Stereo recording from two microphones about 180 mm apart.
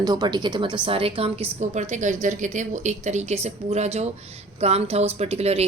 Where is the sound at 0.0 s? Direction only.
25° right (ahead or behind).